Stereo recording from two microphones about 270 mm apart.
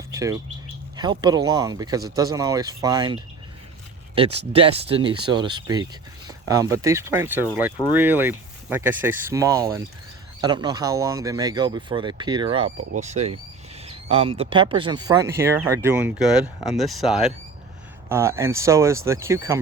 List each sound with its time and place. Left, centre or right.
0.1 s bird: centre
0.9 s speech: centre